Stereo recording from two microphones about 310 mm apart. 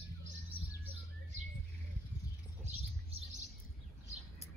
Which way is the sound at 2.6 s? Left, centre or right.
Centre.